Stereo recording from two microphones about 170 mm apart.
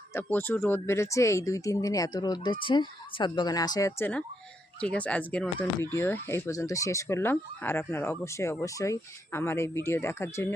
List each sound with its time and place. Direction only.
0.1 s speech: 10° left (ahead or behind)